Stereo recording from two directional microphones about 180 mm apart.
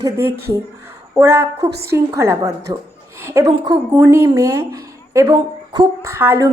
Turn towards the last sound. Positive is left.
turn(degrees=-15)  # may be behind; listen again after turning